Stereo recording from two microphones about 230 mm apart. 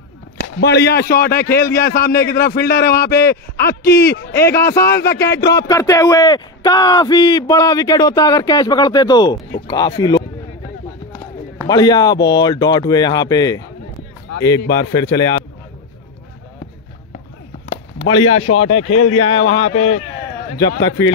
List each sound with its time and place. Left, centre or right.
0.6 s a man's voice: left
4.5 s speech: centre
5.1 s a man's voice: left
5.4 s speech: centre
11.6 s speech: centre
18.2 s a man's voice: left
20.6 s a man's voice: left